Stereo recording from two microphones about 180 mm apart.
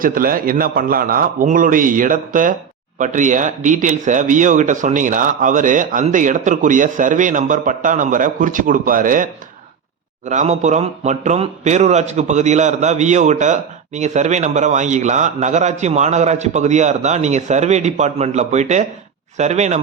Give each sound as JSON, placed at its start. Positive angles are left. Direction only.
{"t": 0.0, "sound": "a man's voice", "side_deg": -50}